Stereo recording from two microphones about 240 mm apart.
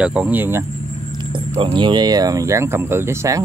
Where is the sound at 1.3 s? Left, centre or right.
Right.